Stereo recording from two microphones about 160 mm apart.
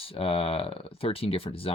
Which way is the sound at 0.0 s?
35° left (ahead or behind).